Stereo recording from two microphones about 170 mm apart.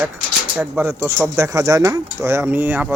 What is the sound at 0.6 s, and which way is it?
Speech, 15° right (ahead or behind).